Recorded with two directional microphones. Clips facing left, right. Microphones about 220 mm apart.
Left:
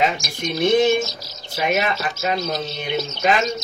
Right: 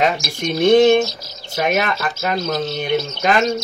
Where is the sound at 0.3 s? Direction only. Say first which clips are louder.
Right 7 dB; 45° right (ahead or behind).